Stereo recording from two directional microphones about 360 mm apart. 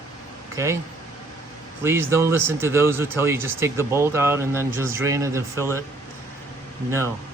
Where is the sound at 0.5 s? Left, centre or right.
Centre.